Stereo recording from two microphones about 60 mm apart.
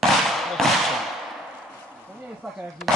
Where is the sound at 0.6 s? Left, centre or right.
Centre.